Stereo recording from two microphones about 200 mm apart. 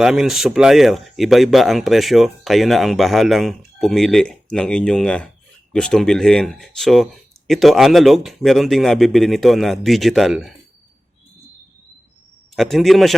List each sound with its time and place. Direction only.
0.0 s speech: centre (ahead or behind)
12.5 s speech: centre (ahead or behind)